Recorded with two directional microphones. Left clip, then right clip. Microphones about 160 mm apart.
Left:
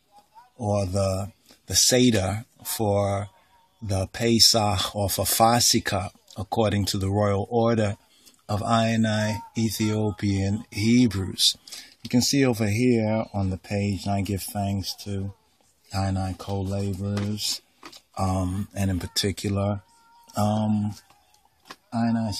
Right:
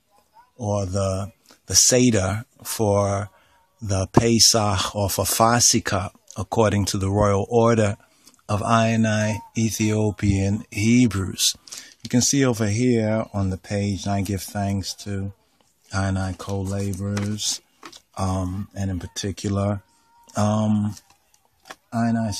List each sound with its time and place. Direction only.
0.6 s speech: 15° right (ahead or behind)
18.7 s speech: 5° left (ahead or behind)
19.3 s speech: 20° right (ahead or behind)
21.9 s speech: 35° right (ahead or behind)